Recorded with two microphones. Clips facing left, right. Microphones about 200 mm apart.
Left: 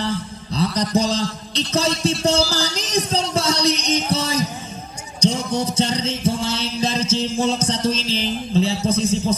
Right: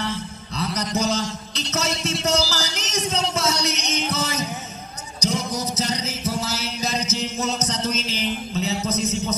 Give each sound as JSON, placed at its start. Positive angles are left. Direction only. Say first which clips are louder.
{"t": 0.6, "sound": "a man's voice", "louder": "left 5 dB", "side_deg": 30}
{"t": 2.5, "sound": "music", "louder": "left 6 dB", "side_deg": 30}
{"t": 5.2, "sound": "mantra", "louder": "left 5 dB", "side_deg": 30}